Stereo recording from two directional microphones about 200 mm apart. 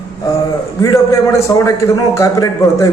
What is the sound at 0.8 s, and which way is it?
A man's voice, 15° left (ahead or behind).